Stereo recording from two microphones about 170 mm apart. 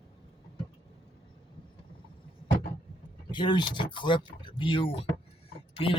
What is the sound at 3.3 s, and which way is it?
Speech, 25° left (ahead or behind).